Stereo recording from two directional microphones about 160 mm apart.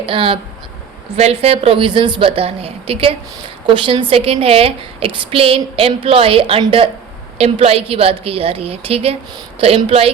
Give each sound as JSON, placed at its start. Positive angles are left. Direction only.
{"t": 0.0, "sound": "a woman's voice", "side_deg": -35}